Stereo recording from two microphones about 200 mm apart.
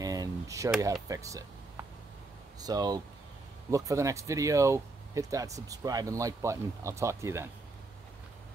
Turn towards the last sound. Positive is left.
turn(degrees=-15)  # may be behind; listen again after turning